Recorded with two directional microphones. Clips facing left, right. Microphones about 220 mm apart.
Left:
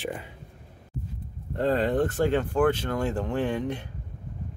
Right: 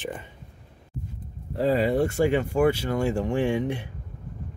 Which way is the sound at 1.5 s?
5° right (ahead or behind).